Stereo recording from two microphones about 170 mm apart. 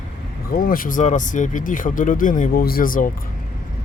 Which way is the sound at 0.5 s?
55° left (ahead or behind).